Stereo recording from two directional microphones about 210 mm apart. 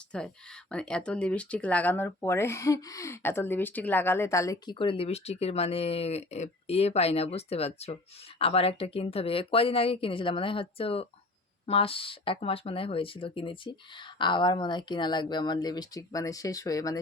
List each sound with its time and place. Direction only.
0.1 s speech: 5° left (ahead or behind)